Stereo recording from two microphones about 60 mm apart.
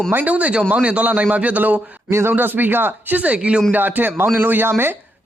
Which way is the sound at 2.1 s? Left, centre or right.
Right.